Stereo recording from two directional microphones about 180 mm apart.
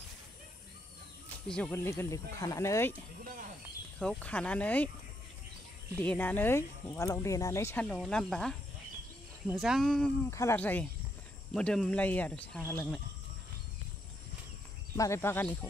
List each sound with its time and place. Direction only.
1.5 s speech: 10° left (ahead or behind)
4.0 s speech: 5° left (ahead or behind)
5.9 s speech: 10° left (ahead or behind)
10.3 s speech: 15° left (ahead or behind)
15.0 s speech: 15° left (ahead or behind)